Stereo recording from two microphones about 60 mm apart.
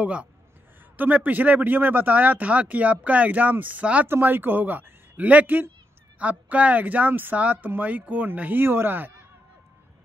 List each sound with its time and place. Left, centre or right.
0.0 s speech: right
4.1 s a man's voice: right